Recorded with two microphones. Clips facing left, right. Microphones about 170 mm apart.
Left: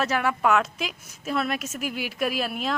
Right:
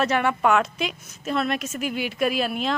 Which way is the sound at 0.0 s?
Centre (ahead or behind).